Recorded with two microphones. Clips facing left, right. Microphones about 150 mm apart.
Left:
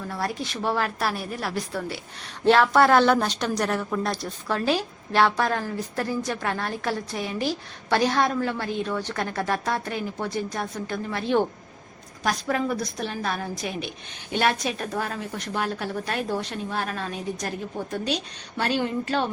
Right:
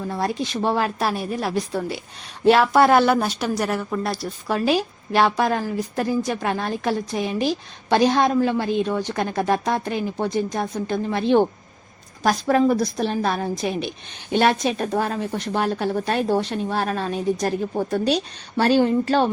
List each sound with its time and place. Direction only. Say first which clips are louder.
0.1 s a woman's voice: right 5 dB; 20° right (ahead or behind)
12.2 s a woman's voice: right 7 dB; 35° right (ahead or behind)